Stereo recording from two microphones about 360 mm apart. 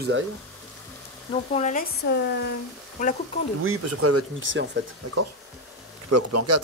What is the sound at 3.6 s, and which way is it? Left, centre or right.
Speech, right.